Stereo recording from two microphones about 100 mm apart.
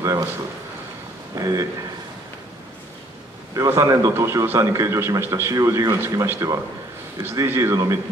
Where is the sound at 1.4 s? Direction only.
30° right (ahead or behind).